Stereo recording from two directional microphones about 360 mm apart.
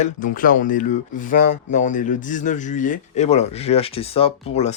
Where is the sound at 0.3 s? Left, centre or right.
Left.